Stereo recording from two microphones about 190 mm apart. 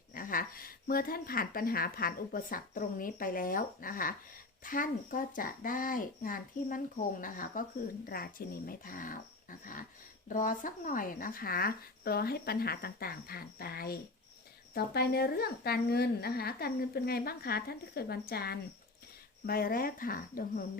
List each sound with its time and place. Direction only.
0.1 s a woman's voice: 45° left (ahead or behind)